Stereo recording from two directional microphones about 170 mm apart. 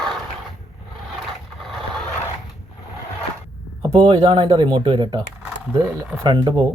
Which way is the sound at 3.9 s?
30° right (ahead or behind).